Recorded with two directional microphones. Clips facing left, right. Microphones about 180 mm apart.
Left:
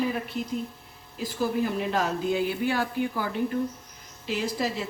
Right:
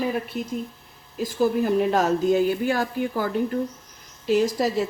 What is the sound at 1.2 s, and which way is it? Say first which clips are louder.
A woman's voice: right 5 dB; 45° right (ahead or behind).